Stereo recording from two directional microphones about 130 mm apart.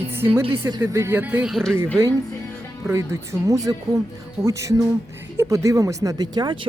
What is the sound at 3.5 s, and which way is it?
Speech, 25° right (ahead or behind).